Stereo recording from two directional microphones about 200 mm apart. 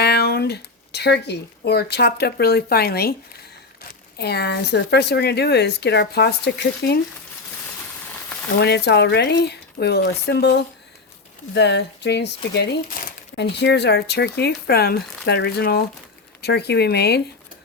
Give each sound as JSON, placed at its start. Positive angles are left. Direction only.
{"t": 0.0, "sound": "speech", "side_deg": 55}
{"t": 8.5, "sound": "speech", "side_deg": 55}